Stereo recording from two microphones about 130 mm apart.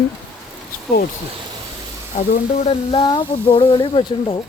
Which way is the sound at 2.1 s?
65° left (ahead or behind).